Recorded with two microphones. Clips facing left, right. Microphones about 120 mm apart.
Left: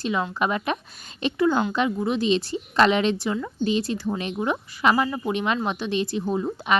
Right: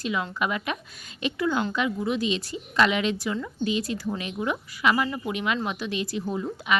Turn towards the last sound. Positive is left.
turn(degrees=30)  # may be behind; listen again after turning